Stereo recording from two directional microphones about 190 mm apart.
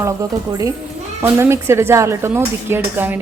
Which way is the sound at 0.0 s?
15° right (ahead or behind).